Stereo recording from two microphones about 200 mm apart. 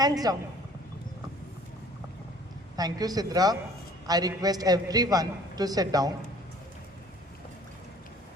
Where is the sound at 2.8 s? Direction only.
20° right (ahead or behind).